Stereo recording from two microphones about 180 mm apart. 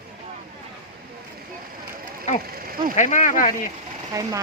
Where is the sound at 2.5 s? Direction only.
55° right (ahead or behind).